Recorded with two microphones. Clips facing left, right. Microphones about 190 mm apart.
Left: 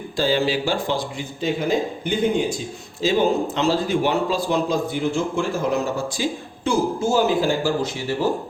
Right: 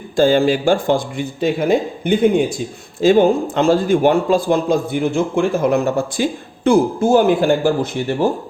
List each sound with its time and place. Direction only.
0.2 s a man's voice: 50° right (ahead or behind)
3.0 s a man's voice: 50° right (ahead or behind)